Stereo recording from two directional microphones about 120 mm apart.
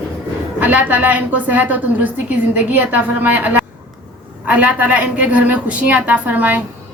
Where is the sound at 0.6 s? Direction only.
15° right (ahead or behind).